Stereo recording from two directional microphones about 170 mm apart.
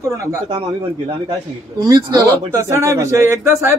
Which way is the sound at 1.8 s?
25° right (ahead or behind).